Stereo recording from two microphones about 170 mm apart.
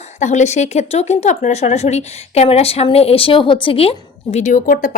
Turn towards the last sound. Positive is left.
turn(degrees=50)  # may be behind; listen again after turning